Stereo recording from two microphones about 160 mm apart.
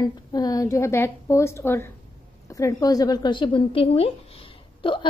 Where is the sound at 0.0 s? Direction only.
25° left (ahead or behind).